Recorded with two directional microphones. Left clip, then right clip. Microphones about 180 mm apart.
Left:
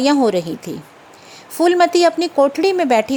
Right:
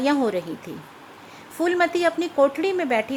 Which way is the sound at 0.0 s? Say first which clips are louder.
Left 7 dB; 35° left (ahead or behind).